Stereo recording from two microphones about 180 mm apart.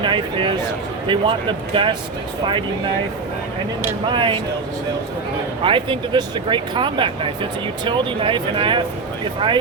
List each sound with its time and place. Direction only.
0.0 s speech: 25° right (ahead or behind)
4.1 s speech: 25° right (ahead or behind)
5.6 s speech: 30° right (ahead or behind)